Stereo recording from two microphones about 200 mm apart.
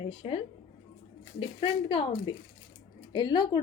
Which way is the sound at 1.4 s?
25° left (ahead or behind).